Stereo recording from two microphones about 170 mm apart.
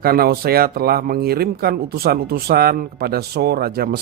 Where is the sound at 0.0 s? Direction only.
65° right (ahead or behind).